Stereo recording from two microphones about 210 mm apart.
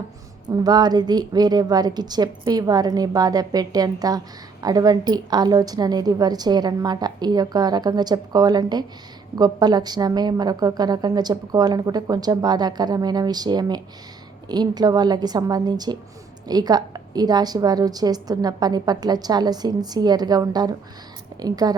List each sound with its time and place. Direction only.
0.4 s a woman's voice: 20° right (ahead or behind)